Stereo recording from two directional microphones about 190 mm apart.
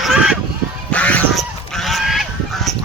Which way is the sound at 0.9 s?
5° left (ahead or behind).